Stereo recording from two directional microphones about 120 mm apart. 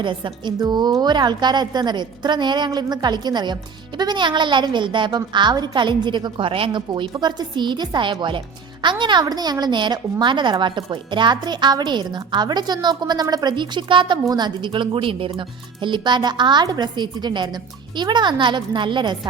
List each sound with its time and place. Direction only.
0.0 s a woman's voice: 40° right (ahead or behind)